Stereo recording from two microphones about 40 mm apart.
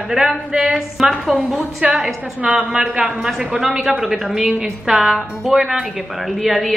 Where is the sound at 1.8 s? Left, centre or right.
Right.